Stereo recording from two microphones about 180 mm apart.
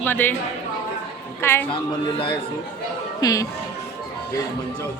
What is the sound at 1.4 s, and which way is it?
Speech, 15° left (ahead or behind).